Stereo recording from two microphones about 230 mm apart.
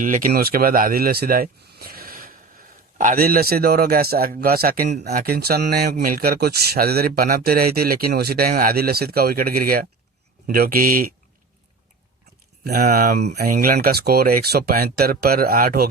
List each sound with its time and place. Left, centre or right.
0.0 s speech: right
12.6 s speech: right